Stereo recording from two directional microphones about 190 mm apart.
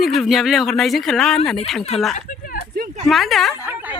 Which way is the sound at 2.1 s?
45° left (ahead or behind).